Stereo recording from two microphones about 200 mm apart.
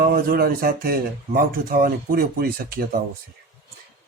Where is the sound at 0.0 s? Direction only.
45° right (ahead or behind).